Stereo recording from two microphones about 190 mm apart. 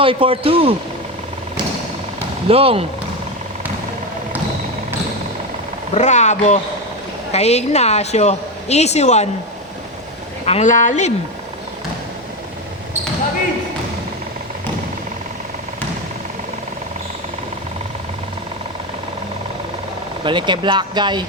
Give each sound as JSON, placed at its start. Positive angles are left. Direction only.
{"t": 0.0, "sound": "speech", "side_deg": -30}
{"t": 2.5, "sound": "speech", "side_deg": -30}
{"t": 5.9, "sound": "a woman's voice", "side_deg": 40}
{"t": 10.4, "sound": "a woman's voice", "side_deg": 35}
{"t": 20.2, "sound": "speech", "side_deg": -25}